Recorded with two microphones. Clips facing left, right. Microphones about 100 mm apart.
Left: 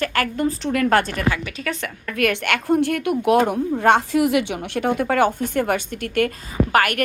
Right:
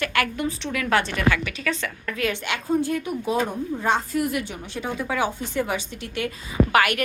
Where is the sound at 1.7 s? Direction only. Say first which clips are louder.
Even; 50° left (ahead or behind).